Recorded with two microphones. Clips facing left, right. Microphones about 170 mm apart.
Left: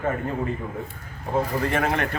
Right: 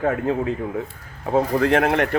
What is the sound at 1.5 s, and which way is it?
Speech, 85° right.